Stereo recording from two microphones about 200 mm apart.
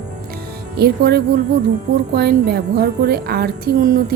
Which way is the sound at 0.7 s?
50° right (ahead or behind).